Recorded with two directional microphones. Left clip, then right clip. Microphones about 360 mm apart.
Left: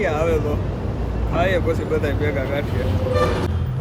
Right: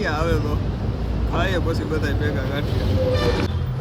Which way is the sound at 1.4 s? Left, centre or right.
Centre.